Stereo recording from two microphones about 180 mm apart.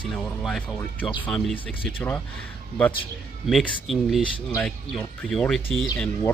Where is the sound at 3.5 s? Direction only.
Centre (ahead or behind).